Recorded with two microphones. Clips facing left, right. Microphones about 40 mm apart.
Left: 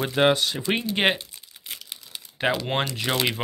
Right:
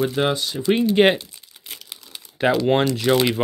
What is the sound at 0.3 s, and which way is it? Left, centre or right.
Speech, left.